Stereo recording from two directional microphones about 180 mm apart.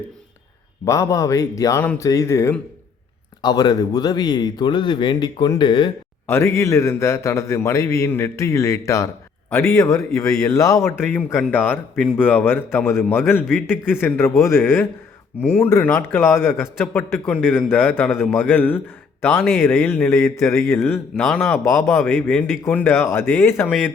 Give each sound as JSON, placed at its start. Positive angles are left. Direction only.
{"t": 0.9, "sound": "speech", "side_deg": 15}
{"t": 6.2, "sound": "speech", "side_deg": 15}
{"t": 21.2, "sound": "speech", "side_deg": 0}